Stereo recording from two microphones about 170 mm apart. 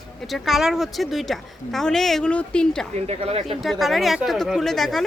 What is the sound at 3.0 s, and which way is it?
Speech, 35° right (ahead or behind).